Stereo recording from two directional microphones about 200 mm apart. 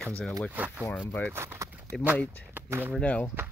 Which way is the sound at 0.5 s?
10° right (ahead or behind).